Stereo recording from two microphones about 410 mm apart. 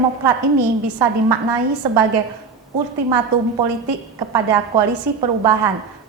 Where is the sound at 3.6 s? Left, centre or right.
Right.